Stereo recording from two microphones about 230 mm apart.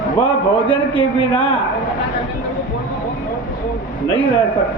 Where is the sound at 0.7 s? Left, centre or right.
Left.